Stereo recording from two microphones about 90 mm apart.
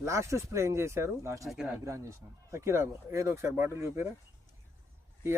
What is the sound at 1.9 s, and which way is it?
Speech, 35° right (ahead or behind).